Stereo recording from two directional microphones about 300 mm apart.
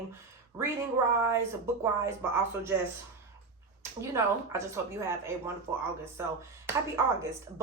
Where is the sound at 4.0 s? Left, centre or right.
Centre.